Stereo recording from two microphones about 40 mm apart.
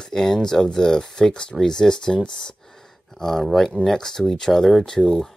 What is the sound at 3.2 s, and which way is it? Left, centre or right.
Speech, centre.